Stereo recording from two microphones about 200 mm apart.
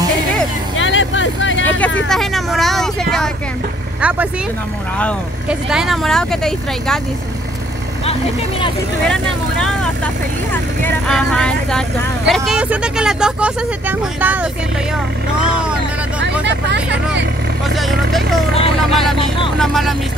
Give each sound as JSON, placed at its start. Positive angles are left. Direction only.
{"t": 0.7, "sound": "vehicle", "side_deg": 70}
{"t": 2.0, "sound": "speech", "side_deg": 0}
{"t": 5.5, "sound": "speech", "side_deg": -5}
{"t": 8.0, "sound": "speech", "side_deg": 30}
{"t": 9.0, "sound": "speech", "side_deg": 5}
{"t": 16.4, "sound": "speech", "side_deg": -60}
{"t": 17.6, "sound": "speech", "side_deg": 0}